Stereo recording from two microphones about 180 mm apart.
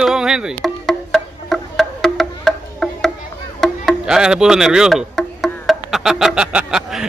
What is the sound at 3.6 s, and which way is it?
Music, centre (ahead or behind).